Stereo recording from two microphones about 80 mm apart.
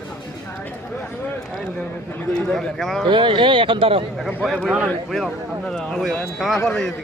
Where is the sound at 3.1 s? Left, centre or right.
Right.